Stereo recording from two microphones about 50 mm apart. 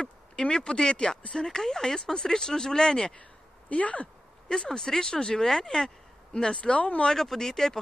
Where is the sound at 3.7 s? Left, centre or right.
Left.